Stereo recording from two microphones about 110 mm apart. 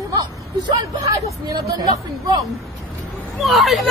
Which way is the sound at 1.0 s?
35° right (ahead or behind).